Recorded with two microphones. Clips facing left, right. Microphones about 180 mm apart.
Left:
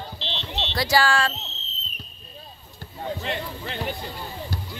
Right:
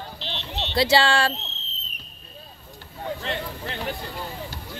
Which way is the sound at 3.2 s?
Centre (ahead or behind).